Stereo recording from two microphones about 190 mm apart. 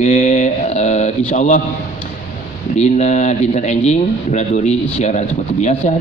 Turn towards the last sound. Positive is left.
turn(degrees=40)  # may be behind; listen again after turning